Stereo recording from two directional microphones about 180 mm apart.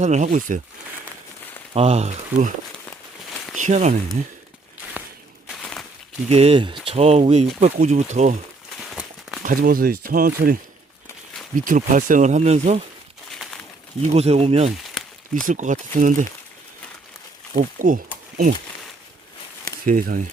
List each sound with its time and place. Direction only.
0.0 s speech: 40° right (ahead or behind)
1.7 s speech: 35° right (ahead or behind)
3.6 s speech: 40° right (ahead or behind)
5.5 s a sound: centre (ahead or behind)
6.2 s speech: 35° right (ahead or behind)
8.8 s a sound: centre (ahead or behind)
9.4 s speech: 50° right (ahead or behind)
11.6 s speech: 45° right (ahead or behind)
13.3 s crumpling: centre (ahead or behind)
14.1 s speech: 35° right (ahead or behind)
14.8 s a sound: centre (ahead or behind)
15.4 s speech: 45° right (ahead or behind)
17.6 s speech: 50° right (ahead or behind)
19.8 s speech: 50° right (ahead or behind)